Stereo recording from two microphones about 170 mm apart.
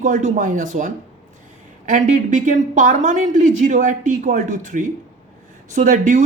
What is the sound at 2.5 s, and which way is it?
A woman's voice, 50° right (ahead or behind).